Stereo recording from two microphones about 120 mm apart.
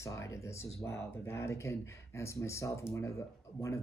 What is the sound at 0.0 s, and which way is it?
Speech, 25° left (ahead or behind).